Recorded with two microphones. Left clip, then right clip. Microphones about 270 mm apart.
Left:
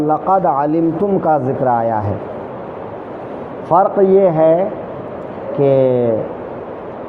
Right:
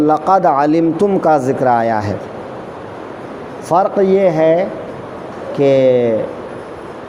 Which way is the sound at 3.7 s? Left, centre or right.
Right.